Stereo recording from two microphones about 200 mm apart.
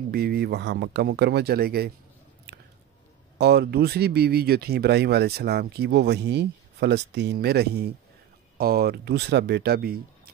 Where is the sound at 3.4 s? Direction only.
55° right (ahead or behind).